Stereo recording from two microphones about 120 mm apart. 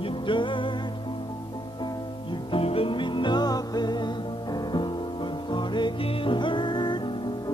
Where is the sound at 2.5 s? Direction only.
50° left (ahead or behind).